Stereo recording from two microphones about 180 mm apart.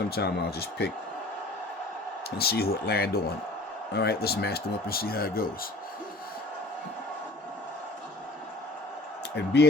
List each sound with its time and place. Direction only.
0.1 s speech: 65° left (ahead or behind)
2.4 s speech: 60° left (ahead or behind)
9.3 s speech: 70° left (ahead or behind)